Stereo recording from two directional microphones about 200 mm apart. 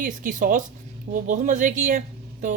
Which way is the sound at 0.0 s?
45° right (ahead or behind).